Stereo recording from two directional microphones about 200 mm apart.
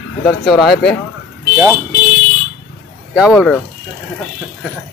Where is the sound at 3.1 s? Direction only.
Centre (ahead or behind).